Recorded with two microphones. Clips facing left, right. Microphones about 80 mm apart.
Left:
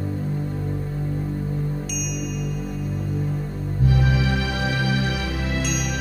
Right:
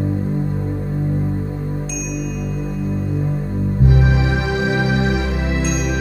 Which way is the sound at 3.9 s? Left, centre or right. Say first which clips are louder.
Right 1 dB; right.